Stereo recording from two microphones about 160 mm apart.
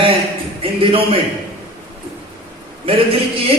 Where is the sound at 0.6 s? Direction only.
35° right (ahead or behind).